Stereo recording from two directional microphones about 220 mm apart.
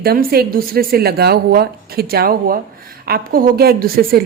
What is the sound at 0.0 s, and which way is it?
A woman's voice, 45° right (ahead or behind).